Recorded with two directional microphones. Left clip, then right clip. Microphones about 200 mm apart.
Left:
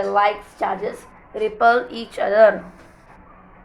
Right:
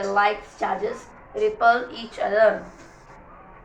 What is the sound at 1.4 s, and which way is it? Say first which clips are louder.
Speech: left 2 dB; 60° left (ahead or behind).